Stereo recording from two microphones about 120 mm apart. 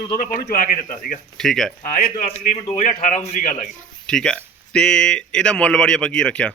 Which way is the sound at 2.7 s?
85° left.